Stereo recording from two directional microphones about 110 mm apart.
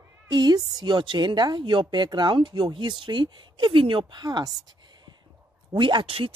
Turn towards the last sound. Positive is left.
turn(degrees=-55)  # may be behind; listen again after turning